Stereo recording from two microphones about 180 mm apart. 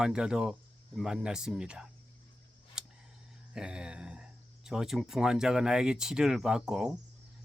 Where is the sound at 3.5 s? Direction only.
5° right (ahead or behind).